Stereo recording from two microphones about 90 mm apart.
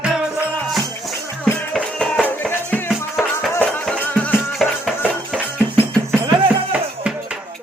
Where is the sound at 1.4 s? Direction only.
10° left (ahead or behind).